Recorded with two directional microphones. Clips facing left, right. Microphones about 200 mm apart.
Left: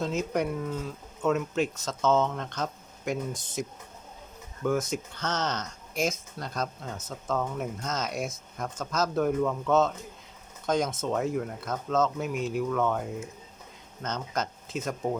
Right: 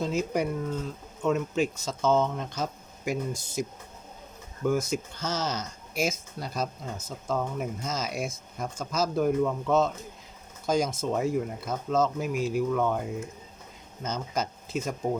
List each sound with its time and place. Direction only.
0.0 s speech: centre (ahead or behind)